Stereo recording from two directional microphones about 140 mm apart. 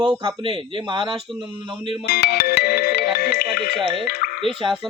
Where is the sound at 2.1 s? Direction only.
90° left.